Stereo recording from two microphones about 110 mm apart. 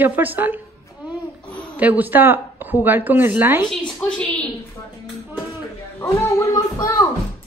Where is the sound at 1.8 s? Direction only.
15° right (ahead or behind).